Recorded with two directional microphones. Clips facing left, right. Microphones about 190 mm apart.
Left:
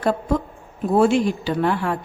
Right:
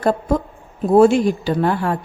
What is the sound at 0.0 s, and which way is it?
A woman's voice, 40° right (ahead or behind).